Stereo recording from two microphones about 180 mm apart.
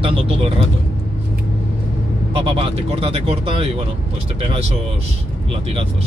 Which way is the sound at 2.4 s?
30° right (ahead or behind).